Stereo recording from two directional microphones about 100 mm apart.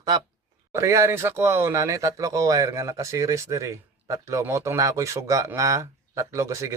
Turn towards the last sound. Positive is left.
turn(degrees=-30)  # may be behind; listen again after turning